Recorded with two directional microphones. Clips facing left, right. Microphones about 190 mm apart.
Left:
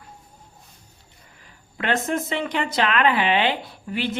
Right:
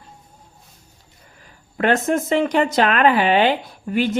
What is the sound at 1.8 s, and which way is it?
Speech, 45° right (ahead or behind).